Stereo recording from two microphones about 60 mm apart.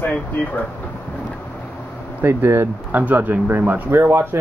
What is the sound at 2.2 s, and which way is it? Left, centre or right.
Speech, right.